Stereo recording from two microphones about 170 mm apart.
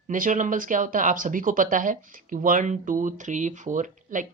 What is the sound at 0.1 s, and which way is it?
Speech, 50° right (ahead or behind).